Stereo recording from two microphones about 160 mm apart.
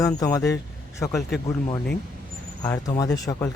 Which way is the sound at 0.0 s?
20° left (ahead or behind).